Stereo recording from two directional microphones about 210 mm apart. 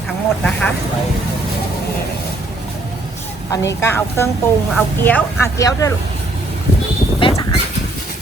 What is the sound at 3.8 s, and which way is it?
Speech, 10° left (ahead or behind).